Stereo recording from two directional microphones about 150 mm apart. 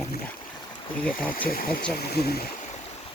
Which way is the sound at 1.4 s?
80° left.